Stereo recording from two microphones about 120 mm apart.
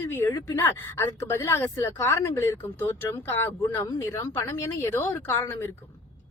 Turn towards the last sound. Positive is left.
turn(degrees=20)  # may be behind; listen again after turning